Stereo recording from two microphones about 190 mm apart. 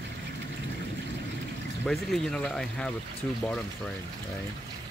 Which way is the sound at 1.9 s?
Centre (ahead or behind).